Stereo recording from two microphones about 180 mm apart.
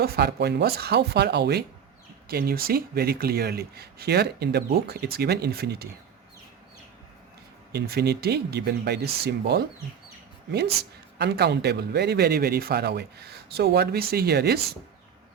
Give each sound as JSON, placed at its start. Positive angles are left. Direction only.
{"t": 0.0, "sound": "speech", "side_deg": -60}
{"t": 7.7, "sound": "speech", "side_deg": -65}